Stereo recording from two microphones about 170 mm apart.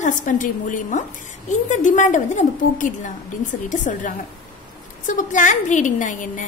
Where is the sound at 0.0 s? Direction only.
50° left (ahead or behind).